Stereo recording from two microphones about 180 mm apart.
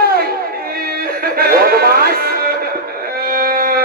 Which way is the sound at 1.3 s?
55° right (ahead or behind).